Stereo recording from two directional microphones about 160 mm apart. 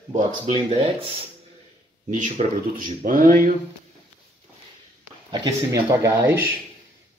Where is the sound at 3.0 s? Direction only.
60° right (ahead or behind).